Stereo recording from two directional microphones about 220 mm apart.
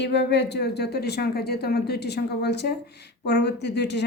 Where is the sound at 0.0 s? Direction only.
50° left (ahead or behind).